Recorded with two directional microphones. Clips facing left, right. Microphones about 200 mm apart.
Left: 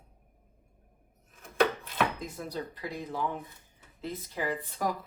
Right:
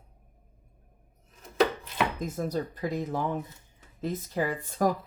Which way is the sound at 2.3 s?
45° right (ahead or behind).